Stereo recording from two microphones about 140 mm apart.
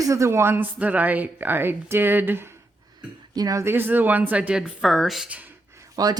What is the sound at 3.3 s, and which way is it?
Speech, 25° right (ahead or behind).